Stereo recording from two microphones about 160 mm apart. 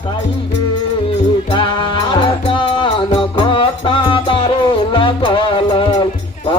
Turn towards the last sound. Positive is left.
turn(degrees=30)  # may be behind; listen again after turning